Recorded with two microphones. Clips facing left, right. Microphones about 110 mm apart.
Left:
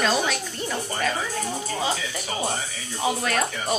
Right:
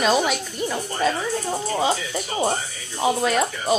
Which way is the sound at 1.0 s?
30° right (ahead or behind).